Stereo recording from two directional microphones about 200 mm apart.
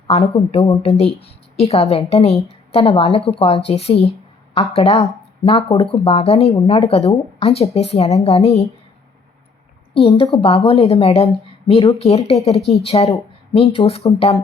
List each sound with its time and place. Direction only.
0.1 s a woman's voice: 30° left (ahead or behind)
9.9 s a woman's voice: 25° left (ahead or behind)